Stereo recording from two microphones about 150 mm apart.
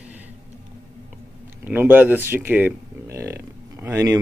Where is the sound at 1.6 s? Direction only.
10° right (ahead or behind).